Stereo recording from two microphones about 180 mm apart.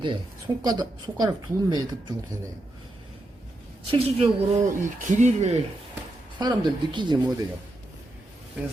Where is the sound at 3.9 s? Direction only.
35° right (ahead or behind).